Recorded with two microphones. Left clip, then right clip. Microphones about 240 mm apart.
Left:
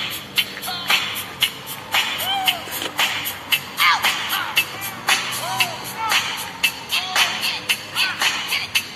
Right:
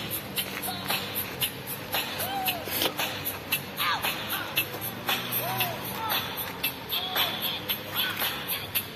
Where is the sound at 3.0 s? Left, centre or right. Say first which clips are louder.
Left 10 dB; left.